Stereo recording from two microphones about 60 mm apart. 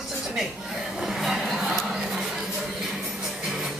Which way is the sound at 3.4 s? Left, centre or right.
Centre.